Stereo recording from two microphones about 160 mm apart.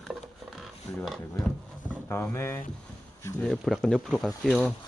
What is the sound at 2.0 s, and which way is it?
Speech, 15° left (ahead or behind).